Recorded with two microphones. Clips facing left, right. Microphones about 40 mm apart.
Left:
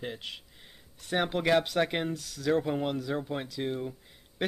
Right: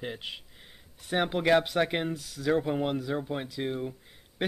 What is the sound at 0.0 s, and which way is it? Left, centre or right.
Speech, centre.